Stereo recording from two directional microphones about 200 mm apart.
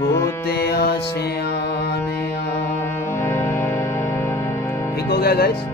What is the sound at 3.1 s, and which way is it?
Music, 10° left (ahead or behind).